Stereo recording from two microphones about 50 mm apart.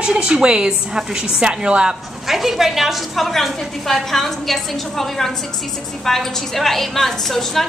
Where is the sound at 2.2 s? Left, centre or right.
Centre.